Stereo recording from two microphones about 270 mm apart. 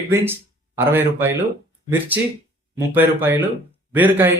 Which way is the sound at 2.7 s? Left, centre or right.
Centre.